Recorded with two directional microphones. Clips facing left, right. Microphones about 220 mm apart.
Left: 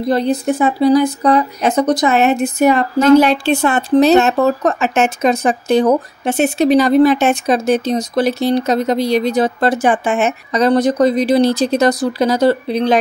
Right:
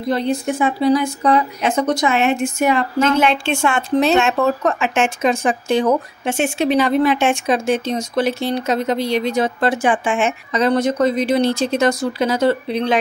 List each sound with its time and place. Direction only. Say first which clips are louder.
0.1 s speech: left 3 dB; 35° left (ahead or behind)